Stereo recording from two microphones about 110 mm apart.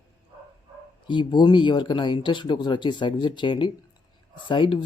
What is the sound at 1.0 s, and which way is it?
Speech, 45° left (ahead or behind).